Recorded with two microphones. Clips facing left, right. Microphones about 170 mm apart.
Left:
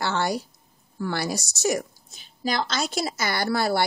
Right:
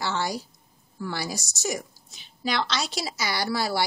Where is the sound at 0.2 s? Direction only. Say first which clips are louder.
Left 4 dB; centre (ahead or behind).